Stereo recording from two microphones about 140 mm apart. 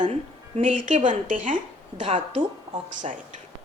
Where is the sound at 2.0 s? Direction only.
50° right (ahead or behind).